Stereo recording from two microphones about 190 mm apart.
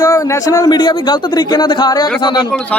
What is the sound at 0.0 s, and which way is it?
A man's voice, 20° left (ahead or behind).